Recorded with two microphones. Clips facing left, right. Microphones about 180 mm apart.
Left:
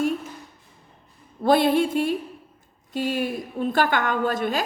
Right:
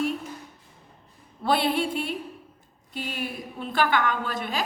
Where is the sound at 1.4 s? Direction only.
45° left (ahead or behind).